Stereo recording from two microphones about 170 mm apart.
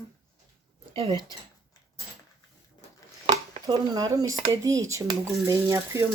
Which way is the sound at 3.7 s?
25° right (ahead or behind).